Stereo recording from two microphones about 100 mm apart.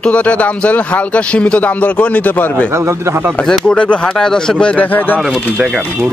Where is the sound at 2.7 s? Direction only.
30° right (ahead or behind).